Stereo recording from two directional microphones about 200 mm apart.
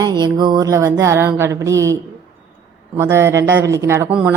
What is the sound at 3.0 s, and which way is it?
Speech, 15° right (ahead or behind).